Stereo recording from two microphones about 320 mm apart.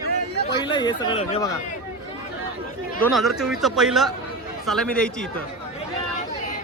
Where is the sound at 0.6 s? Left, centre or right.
Centre.